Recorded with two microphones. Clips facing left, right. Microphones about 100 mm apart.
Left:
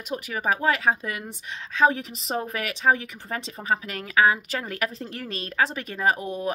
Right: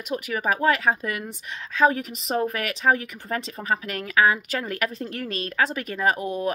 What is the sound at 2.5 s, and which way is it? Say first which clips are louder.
Speech: right 1 dB; 40° right (ahead or behind).